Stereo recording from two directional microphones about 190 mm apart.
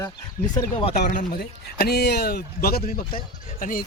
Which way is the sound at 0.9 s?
45° left (ahead or behind).